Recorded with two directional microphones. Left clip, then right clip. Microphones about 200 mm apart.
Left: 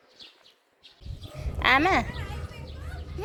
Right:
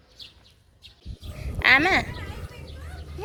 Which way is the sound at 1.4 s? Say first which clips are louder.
Right 3 dB; 5° left (ahead or behind).